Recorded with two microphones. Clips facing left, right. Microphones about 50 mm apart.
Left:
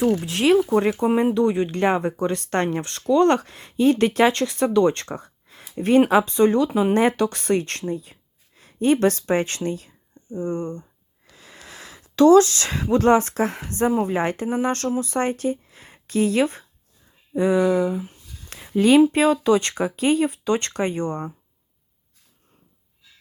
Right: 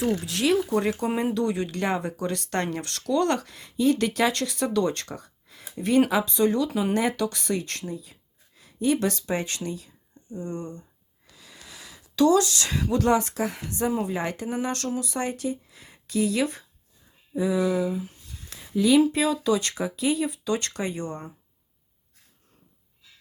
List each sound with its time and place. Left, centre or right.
0.1 s speech: left
0.9 s speech: centre; by 10.8 s left
11.3 s a sound: left
12.8 s a woman's voice: left
17.3 s speech: left
18.5 s a sound: left
19.1 s speech: left